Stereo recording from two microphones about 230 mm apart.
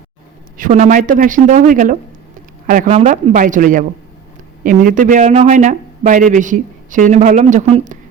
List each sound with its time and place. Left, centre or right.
0.5 s a man's voice: right